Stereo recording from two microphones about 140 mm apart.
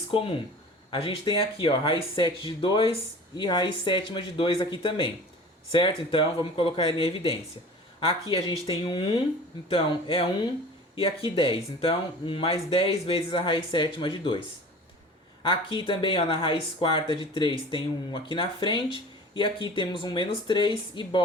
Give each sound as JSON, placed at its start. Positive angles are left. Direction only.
{"t": 0.1, "sound": "speech", "side_deg": 40}
{"t": 15.4, "sound": "speech", "side_deg": 40}